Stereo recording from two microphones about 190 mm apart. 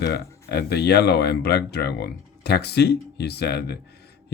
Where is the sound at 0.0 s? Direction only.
60° left (ahead or behind).